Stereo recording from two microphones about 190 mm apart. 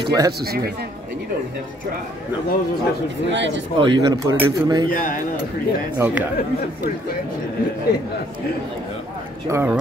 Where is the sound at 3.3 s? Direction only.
75° right (ahead or behind).